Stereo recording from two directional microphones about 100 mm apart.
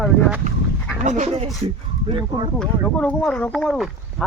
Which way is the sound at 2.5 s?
10° left (ahead or behind).